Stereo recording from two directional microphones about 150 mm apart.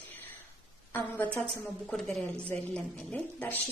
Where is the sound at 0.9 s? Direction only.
10° left (ahead or behind).